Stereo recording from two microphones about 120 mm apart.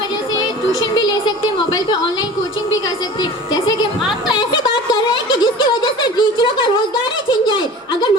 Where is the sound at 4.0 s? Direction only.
Centre (ahead or behind).